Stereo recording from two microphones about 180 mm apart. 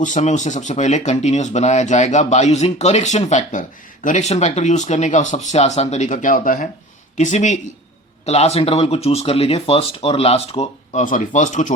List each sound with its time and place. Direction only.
0.0 s speech: 45° left (ahead or behind)